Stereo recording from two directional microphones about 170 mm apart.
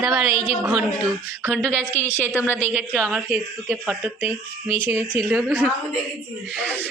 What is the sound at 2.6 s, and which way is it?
A woman's voice, 10° right (ahead or behind).